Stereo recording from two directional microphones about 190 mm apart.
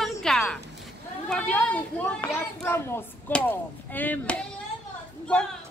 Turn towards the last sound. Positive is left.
turn(degrees=5)  # may be behind; listen again after turning